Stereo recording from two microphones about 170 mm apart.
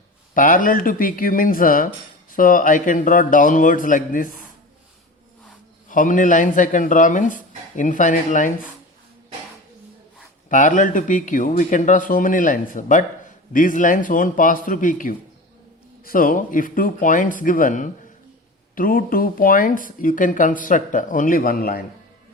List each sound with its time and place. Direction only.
0.3 s speech: 50° left (ahead or behind)
5.9 s speech: 50° left (ahead or behind)
10.5 s speech: 50° left (ahead or behind)